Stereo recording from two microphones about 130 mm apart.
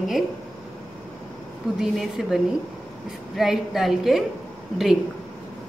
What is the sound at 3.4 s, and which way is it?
Speech, centre (ahead or behind).